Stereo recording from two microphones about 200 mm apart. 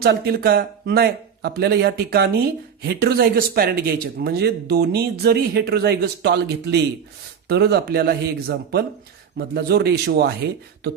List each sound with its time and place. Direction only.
0.0 s speech: 50° right (ahead or behind)